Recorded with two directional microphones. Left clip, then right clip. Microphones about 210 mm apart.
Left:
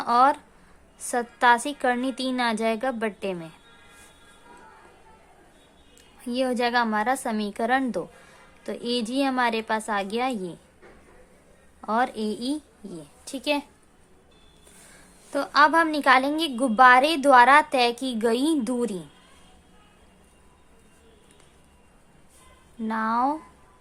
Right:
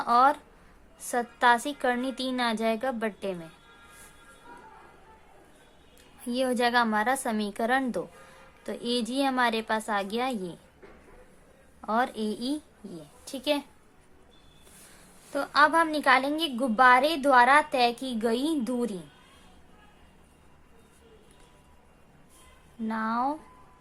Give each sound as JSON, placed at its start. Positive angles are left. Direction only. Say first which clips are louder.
{"t": 0.0, "sound": "a woman's voice", "louder": "left 2 dB", "side_deg": 15}
{"t": 6.2, "sound": "a woman's voice", "louder": "left 1 dB", "side_deg": 10}
{"t": 11.8, "sound": "a woman's voice", "louder": "left 3 dB", "side_deg": 15}
{"t": 15.3, "sound": "a woman's voice", "louder": "left 3 dB", "side_deg": 20}
{"t": 22.9, "sound": "a woman's voice", "louder": "left 5 dB", "side_deg": 25}